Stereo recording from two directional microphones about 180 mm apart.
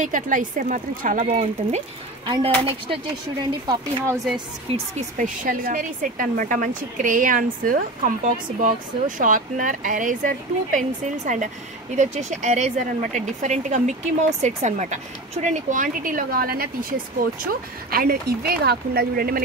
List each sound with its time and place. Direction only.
0.0 s speech: 45° right (ahead or behind)
2.2 s speech: 25° right (ahead or behind)
4.7 s speech: 40° right (ahead or behind)